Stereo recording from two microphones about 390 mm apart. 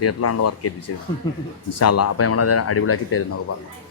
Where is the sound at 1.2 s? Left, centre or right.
Centre.